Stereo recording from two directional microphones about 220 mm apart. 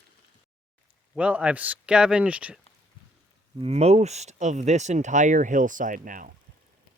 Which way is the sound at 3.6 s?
30° right (ahead or behind).